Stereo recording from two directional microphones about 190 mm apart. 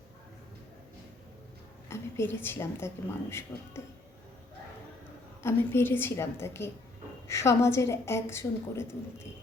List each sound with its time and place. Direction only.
1.9 s a woman's voice: 10° left (ahead or behind)
5.4 s a woman's voice: 10° left (ahead or behind)